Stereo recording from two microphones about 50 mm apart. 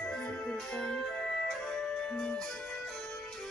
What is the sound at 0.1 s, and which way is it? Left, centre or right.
Music, centre.